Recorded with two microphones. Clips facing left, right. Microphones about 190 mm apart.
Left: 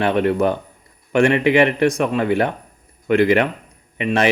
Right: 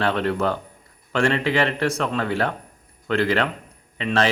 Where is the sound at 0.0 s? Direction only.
15° left (ahead or behind).